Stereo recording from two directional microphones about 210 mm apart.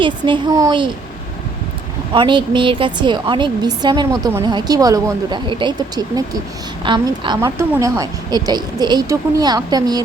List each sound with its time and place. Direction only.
0.0 s a woman's voice: 20° right (ahead or behind)
2.1 s a woman's voice: 25° right (ahead or behind)